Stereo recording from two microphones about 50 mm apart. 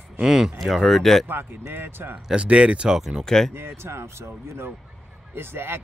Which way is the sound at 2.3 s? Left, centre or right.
Right.